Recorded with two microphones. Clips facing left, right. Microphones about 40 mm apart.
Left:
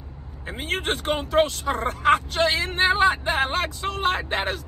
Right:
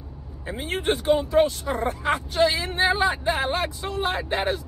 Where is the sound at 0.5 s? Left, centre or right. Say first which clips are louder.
Right 1 dB; left.